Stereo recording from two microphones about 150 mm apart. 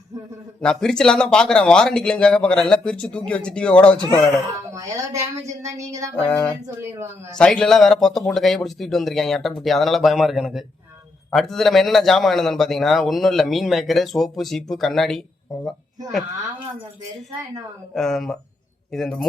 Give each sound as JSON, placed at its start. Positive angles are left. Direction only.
{"t": 0.6, "sound": "a man's voice", "side_deg": 5}
{"t": 4.7, "sound": "a woman's voice", "side_deg": -20}
{"t": 6.1, "sound": "speech", "side_deg": 10}
{"t": 6.7, "sound": "speech", "side_deg": -15}
{"t": 7.3, "sound": "a man's voice", "side_deg": 5}
{"t": 17.9, "sound": "a man's voice", "side_deg": 0}